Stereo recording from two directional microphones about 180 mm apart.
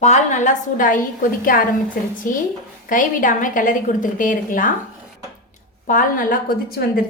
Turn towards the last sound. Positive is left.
turn(degrees=55)  # may be behind; listen again after turning